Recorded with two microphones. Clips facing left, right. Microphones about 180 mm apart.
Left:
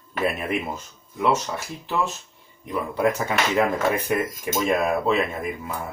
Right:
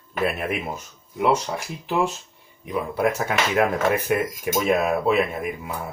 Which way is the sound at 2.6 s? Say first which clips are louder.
Even; 10° right (ahead or behind).